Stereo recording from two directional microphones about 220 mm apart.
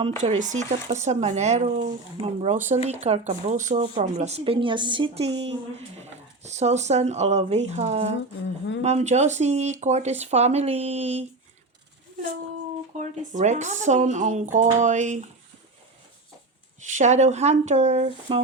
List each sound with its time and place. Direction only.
0.2 s speech: 35° right (ahead or behind)
6.4 s speech: 30° right (ahead or behind)
13.0 s speech: 35° right (ahead or behind)
16.9 s speech: 30° right (ahead or behind)